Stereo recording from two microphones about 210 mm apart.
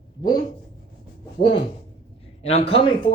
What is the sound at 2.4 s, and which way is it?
Speech, 30° left (ahead or behind).